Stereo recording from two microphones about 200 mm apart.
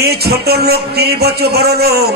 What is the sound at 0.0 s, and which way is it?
A man's voice, 50° right (ahead or behind).